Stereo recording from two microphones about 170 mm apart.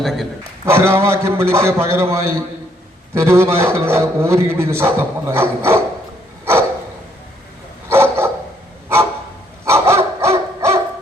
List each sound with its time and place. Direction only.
0.0 s a man's voice: centre (ahead or behind)
0.6 s a man's voice: 15° right (ahead or behind)
6.4 s a sound: 15° right (ahead or behind)
7.9 s dog: 15° right (ahead or behind)
9.6 s dog: 15° right (ahead or behind)